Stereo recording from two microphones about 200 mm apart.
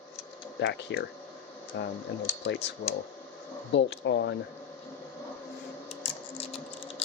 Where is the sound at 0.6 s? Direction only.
60° left (ahead or behind).